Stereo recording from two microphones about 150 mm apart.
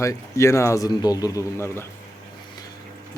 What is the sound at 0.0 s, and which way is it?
Speech, 20° left (ahead or behind).